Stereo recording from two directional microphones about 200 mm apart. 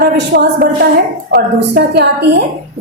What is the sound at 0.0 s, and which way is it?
A woman's voice, 45° right (ahead or behind).